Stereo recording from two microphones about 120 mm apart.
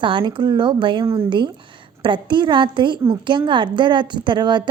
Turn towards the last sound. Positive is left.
turn(degrees=-40)  # may be behind; listen again after turning